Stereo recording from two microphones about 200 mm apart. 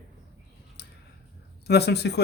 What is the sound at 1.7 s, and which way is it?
Speech, 55° left (ahead or behind).